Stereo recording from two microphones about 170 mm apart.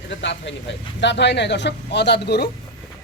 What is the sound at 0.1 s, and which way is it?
Speech, 90° left.